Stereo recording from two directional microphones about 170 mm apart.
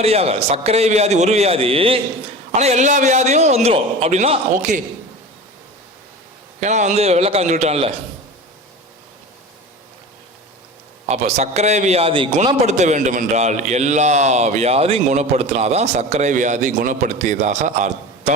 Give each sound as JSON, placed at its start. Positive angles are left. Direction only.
{"t": 0.0, "sound": "a man's voice", "side_deg": -35}
{"t": 6.6, "sound": "a man's voice", "side_deg": -45}
{"t": 11.1, "sound": "a man's voice", "side_deg": -40}
{"t": 12.6, "sound": "a man's voice", "side_deg": -45}